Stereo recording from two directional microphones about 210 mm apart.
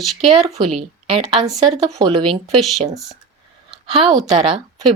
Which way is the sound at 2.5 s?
Centre (ahead or behind).